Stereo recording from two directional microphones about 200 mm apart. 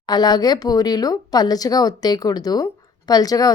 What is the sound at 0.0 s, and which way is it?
Speech, 20° left (ahead or behind).